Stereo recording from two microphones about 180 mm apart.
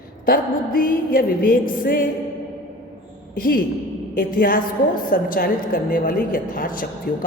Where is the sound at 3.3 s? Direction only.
55° left (ahead or behind).